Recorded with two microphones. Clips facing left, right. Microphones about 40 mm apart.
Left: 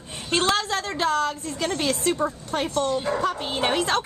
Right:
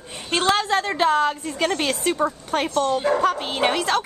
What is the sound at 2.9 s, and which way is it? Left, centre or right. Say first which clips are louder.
Speech: right 4 dB; right.